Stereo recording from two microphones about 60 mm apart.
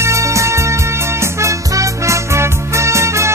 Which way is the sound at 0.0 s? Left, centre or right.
Right.